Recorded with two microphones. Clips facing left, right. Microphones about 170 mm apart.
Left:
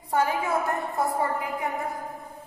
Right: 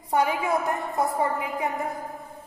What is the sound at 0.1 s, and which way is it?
A woman's voice, 15° right (ahead or behind).